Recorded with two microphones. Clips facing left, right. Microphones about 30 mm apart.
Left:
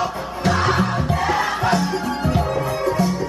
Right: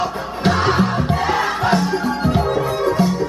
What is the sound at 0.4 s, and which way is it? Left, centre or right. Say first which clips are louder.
Music: right 2 dB; right.